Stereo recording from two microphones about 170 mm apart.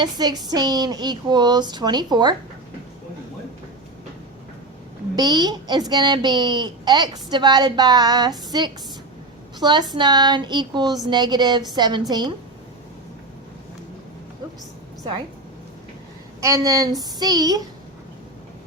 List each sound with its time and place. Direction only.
0.0 s a woman's voice: 25° right (ahead or behind)
5.1 s a woman's voice: 20° right (ahead or behind)
9.6 s a woman's voice: 25° right (ahead or behind)
16.4 s a woman's voice: 20° right (ahead or behind)